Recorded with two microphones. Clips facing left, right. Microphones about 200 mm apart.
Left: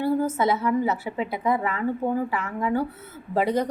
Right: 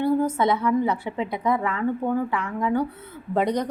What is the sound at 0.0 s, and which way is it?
A woman's voice, 5° left (ahead or behind).